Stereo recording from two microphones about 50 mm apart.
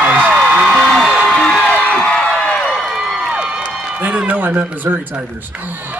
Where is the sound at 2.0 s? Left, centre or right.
Centre.